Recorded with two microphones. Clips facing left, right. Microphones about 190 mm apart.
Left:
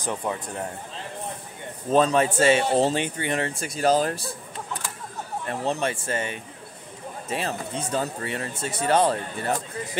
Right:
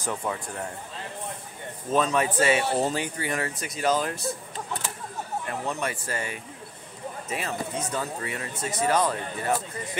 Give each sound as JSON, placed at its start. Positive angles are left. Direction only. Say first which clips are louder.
{"t": 0.0, "sound": "speech", "louder": "left 2 dB", "side_deg": 20}
{"t": 1.9, "sound": "speech", "louder": "left 4 dB", "side_deg": 30}
{"t": 5.5, "sound": "speech", "louder": "left 6 dB", "side_deg": 30}